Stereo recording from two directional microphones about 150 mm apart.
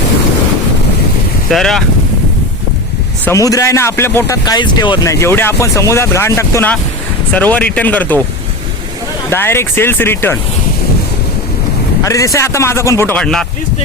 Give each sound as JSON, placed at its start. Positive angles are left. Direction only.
{"t": 1.5, "sound": "speech", "side_deg": 0}
{"t": 3.2, "sound": "speech", "side_deg": 20}
{"t": 9.3, "sound": "speech", "side_deg": 15}
{"t": 12.0, "sound": "speech", "side_deg": 20}
{"t": 13.1, "sound": "speech", "side_deg": 5}